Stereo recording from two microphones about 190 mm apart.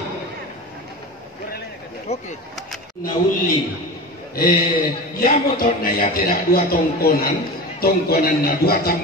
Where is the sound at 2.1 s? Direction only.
35° left (ahead or behind).